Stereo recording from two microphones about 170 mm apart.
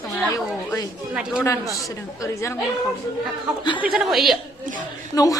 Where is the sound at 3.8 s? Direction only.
5° right (ahead or behind).